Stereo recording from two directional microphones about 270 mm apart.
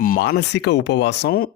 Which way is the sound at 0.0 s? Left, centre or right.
Left.